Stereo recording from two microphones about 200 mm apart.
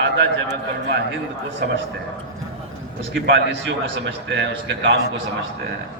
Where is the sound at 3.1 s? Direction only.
70° right (ahead or behind).